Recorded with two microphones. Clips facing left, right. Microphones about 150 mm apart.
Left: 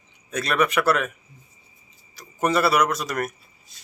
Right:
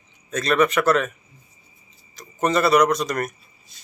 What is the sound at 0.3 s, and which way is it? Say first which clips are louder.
Speech: right 3 dB; 10° left (ahead or behind).